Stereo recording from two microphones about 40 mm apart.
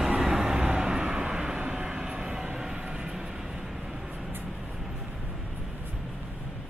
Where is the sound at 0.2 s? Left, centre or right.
Centre.